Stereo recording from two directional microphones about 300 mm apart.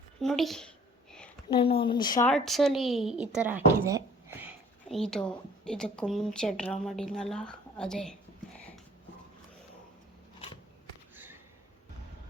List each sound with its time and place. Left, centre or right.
0.2 s speech: centre
1.5 s a woman's voice: centre
2.3 s speech: centre
11.1 s sniff: centre